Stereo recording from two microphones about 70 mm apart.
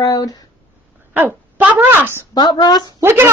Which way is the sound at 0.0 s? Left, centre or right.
Left.